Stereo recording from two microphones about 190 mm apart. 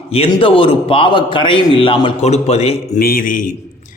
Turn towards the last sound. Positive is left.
turn(degrees=45)  # may be behind; listen again after turning